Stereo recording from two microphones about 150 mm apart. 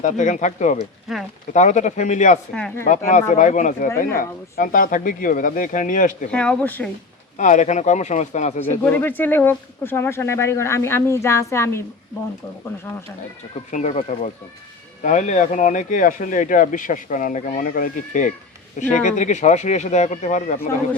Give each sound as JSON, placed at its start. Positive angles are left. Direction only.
{"t": 0.0, "sound": "speech", "side_deg": 55}
{"t": 2.5, "sound": "speech", "side_deg": 5}
{"t": 2.8, "sound": "speech", "side_deg": 55}
{"t": 6.3, "sound": "speech", "side_deg": 10}
{"t": 7.3, "sound": "speech", "side_deg": 55}
{"t": 8.8, "sound": "speech", "side_deg": 10}
{"t": 13.7, "sound": "speech", "side_deg": 55}